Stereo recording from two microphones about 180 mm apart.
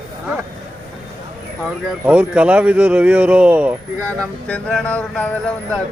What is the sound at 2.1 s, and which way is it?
Speech, 5° right (ahead or behind).